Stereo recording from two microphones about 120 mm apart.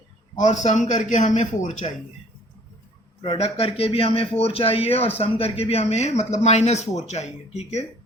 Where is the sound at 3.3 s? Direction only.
60° left (ahead or behind).